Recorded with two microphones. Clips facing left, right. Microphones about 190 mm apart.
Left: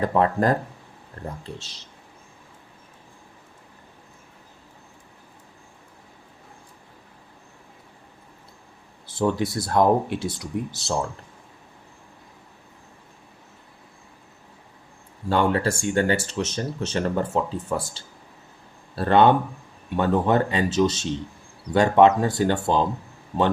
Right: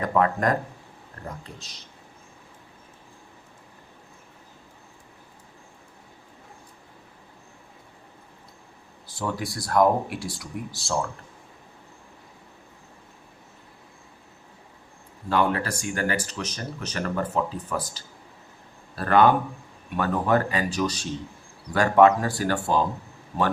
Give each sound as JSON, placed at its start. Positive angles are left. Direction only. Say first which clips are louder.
{"t": 0.0, "sound": "speech", "louder": "left 2 dB", "side_deg": 30}
{"t": 9.1, "sound": "speech", "louder": "left 7 dB", "side_deg": 25}
{"t": 15.3, "sound": "speech", "louder": "left 3 dB", "side_deg": 30}